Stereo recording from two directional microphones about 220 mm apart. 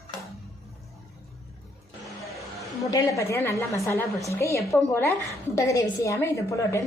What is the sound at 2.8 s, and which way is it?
A woman's voice, 15° left (ahead or behind).